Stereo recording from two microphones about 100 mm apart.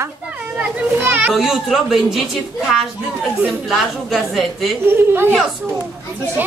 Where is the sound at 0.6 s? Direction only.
15° right (ahead or behind).